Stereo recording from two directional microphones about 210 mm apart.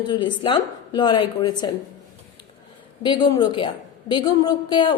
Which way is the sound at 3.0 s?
20° left (ahead or behind).